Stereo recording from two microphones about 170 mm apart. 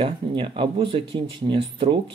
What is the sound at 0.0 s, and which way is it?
Speech, 30° right (ahead or behind).